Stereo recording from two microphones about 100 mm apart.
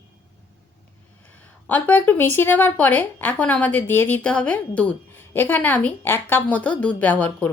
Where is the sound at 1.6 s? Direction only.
15° left (ahead or behind).